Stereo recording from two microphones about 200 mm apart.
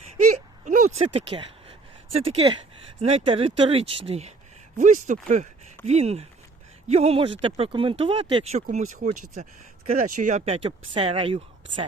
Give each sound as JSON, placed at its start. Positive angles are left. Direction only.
{"t": 0.2, "sound": "a sound", "side_deg": -40}
{"t": 1.0, "sound": "speech", "side_deg": -25}
{"t": 8.6, "sound": "speech", "side_deg": -40}